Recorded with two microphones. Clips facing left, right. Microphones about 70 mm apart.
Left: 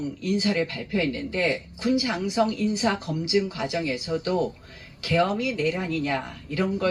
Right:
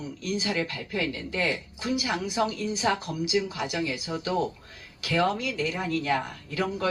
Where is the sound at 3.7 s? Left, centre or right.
Right.